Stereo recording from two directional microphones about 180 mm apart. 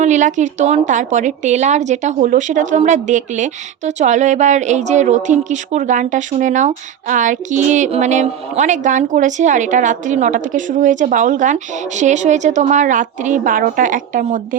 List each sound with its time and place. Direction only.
0.0 s a woman's voice: 40° right (ahead or behind)